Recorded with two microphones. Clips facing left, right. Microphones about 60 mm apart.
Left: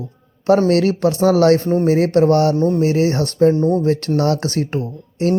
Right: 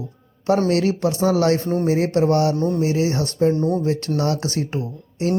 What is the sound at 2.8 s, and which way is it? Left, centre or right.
Speech, left.